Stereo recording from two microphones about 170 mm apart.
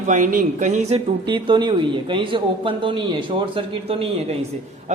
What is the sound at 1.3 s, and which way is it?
A man's voice, 25° right (ahead or behind).